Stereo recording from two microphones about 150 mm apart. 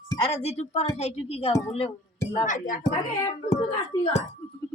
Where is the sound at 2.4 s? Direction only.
60° left (ahead or behind).